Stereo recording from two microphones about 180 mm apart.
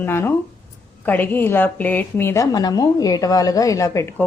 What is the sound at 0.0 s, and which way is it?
A woman's voice, 15° left (ahead or behind).